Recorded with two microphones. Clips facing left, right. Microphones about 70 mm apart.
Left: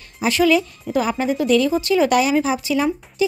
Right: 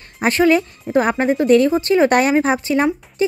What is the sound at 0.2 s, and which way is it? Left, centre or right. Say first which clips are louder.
A woman's voice: right 2 dB; right.